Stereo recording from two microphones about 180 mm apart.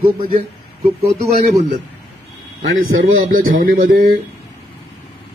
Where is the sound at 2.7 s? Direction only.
90° right.